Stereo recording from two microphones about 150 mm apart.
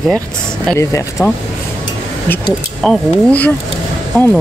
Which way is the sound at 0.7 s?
20° left (ahead or behind).